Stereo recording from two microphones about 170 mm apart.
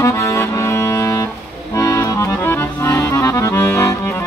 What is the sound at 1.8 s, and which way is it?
Accordion, 20° left (ahead or behind).